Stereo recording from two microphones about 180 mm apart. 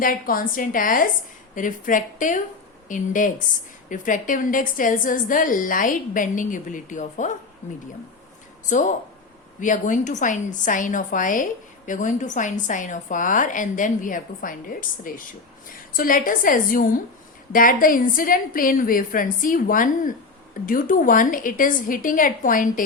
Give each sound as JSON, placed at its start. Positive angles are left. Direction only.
{"t": 0.0, "sound": "a woman's voice", "side_deg": 50}
{"t": 8.7, "sound": "a woman's voice", "side_deg": 45}